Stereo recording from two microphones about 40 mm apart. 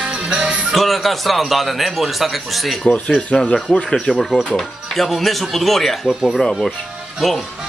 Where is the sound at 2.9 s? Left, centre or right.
Left.